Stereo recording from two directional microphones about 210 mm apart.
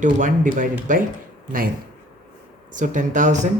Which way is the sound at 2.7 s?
35° right (ahead or behind).